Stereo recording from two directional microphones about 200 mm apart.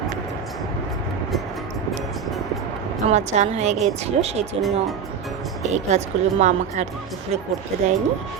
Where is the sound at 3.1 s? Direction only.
35° right (ahead or behind).